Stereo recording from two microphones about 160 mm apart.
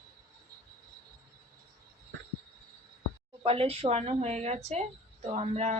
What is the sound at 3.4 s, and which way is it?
A woman's voice, 35° right (ahead or behind).